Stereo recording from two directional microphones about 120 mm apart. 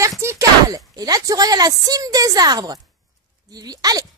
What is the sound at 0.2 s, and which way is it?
Speech, 25° right (ahead or behind).